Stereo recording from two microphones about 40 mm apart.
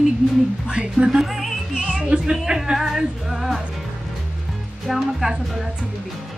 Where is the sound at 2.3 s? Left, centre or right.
Centre.